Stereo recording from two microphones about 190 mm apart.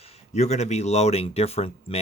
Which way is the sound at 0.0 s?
35° left (ahead or behind).